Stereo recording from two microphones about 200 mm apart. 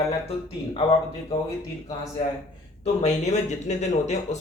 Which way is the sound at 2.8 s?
35° left (ahead or behind).